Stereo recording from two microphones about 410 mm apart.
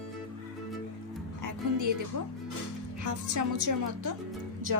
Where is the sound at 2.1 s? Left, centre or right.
Right.